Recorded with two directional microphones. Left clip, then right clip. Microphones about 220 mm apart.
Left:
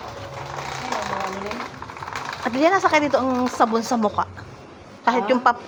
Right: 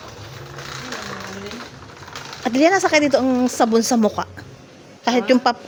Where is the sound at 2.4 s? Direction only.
50° right (ahead or behind).